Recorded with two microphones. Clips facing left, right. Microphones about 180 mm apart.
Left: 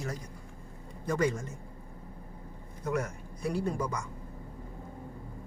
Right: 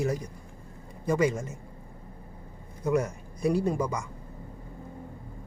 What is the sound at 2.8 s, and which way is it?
Speech, 15° right (ahead or behind).